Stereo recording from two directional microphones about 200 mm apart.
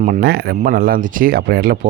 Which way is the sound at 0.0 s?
45° right (ahead or behind).